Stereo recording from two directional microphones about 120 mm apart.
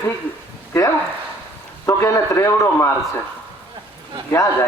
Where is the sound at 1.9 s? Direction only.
25° left (ahead or behind).